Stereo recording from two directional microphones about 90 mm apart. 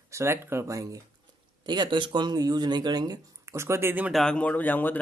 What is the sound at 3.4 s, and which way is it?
Speech, 30° right (ahead or behind).